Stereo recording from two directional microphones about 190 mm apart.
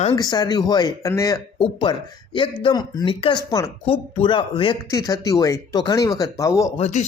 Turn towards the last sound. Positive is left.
turn(degrees=35)  # may be behind; listen again after turning